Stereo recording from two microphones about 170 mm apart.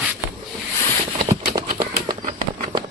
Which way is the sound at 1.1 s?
40° right (ahead or behind).